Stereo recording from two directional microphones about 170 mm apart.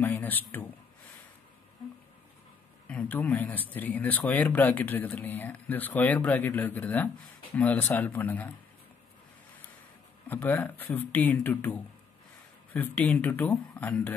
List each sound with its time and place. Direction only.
0.0 s speech: 10° left (ahead or behind)
2.9 s a man's voice: 10° left (ahead or behind)
10.2 s speech: 10° left (ahead or behind)